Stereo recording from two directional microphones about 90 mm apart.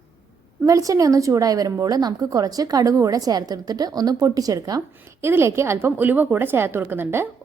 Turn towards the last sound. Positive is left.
turn(degrees=-25)  # may be behind; listen again after turning